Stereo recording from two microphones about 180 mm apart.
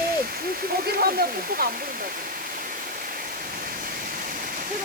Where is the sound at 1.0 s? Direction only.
55° right (ahead or behind).